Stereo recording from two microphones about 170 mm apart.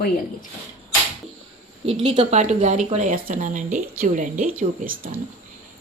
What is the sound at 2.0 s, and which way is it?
A woman's voice, 40° right (ahead or behind).